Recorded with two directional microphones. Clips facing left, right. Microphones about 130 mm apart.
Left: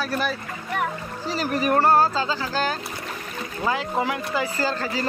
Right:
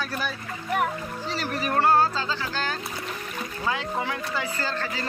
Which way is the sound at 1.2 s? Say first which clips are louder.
Left 6 dB; 10° left (ahead or behind).